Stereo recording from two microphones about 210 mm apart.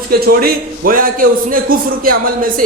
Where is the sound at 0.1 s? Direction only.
45° right (ahead or behind).